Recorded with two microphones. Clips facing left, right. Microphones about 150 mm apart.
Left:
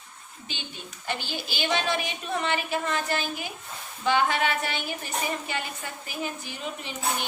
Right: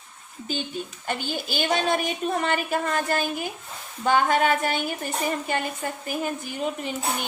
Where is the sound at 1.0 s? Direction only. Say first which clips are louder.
Right 2 dB; 45° right (ahead or behind).